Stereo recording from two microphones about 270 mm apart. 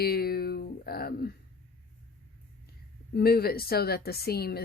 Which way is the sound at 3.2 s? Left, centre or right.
Left.